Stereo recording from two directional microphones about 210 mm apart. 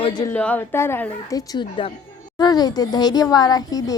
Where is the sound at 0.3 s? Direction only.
5° left (ahead or behind).